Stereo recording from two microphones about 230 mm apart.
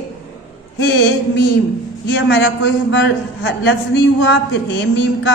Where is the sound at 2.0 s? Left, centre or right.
Left.